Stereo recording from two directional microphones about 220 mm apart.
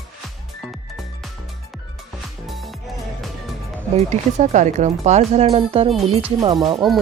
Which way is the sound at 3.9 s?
30° right (ahead or behind).